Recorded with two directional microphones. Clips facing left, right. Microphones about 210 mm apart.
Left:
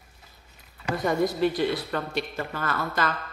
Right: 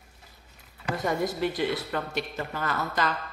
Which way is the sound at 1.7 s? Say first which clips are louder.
Left 2 dB; 20° right (ahead or behind).